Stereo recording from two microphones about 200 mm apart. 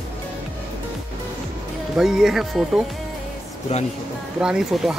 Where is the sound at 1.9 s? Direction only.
5° right (ahead or behind).